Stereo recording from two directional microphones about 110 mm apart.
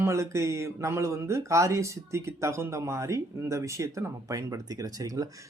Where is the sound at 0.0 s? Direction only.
25° right (ahead or behind).